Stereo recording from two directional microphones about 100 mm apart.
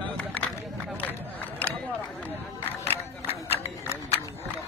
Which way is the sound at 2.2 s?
20° left (ahead or behind).